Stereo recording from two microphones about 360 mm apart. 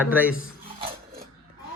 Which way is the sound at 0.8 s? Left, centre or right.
Right.